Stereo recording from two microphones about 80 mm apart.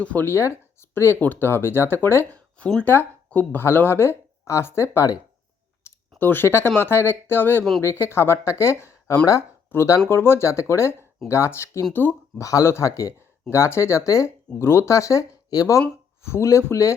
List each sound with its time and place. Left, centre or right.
0.0 s speech: left
2.6 s speech: centre
2.8 s speech: left
5.8 s a sound: left
6.7 s speech: left
12.0 s speech: left
12.4 s speech: left
16.2 s speech: left